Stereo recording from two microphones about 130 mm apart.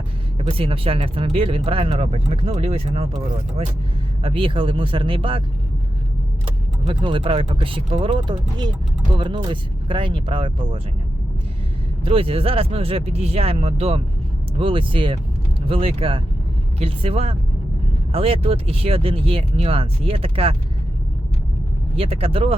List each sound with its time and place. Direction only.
0.3 s speech: 45° right (ahead or behind)
4.2 s speech: 45° right (ahead or behind)
6.8 s speech: 40° right (ahead or behind)
12.0 s speech: 45° right (ahead or behind)
21.9 s speech: 45° right (ahead or behind)